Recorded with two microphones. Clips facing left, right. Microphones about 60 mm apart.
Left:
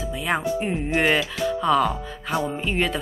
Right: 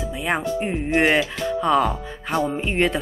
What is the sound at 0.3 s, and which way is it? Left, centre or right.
A woman's voice, centre.